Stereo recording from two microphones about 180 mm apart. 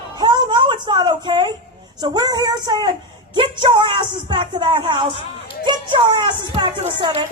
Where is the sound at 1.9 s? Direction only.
20° right (ahead or behind).